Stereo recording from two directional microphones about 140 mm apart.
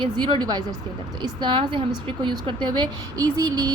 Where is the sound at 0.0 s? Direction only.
35° right (ahead or behind).